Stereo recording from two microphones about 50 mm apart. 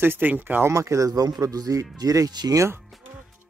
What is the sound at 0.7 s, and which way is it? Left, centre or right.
Speech, right.